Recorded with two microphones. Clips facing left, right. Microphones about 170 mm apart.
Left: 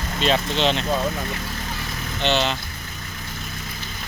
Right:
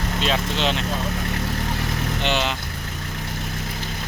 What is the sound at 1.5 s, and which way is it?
Vehicle, 65° right (ahead or behind).